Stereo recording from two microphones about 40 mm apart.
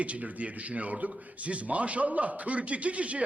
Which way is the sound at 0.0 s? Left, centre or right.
Right.